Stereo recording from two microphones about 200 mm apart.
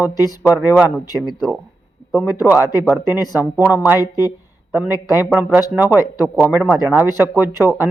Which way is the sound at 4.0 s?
15° left (ahead or behind).